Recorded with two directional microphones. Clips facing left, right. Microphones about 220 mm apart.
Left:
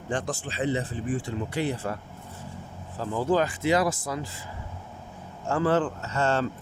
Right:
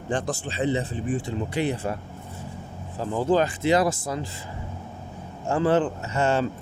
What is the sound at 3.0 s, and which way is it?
Speech, 25° right (ahead or behind).